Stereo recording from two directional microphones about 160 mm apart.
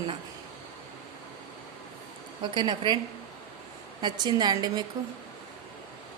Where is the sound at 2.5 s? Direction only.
30° right (ahead or behind).